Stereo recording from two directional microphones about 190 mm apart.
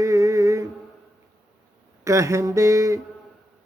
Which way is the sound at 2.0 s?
15° right (ahead or behind).